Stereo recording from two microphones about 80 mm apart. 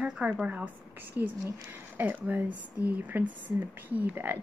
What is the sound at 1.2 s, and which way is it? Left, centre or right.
Speech, right.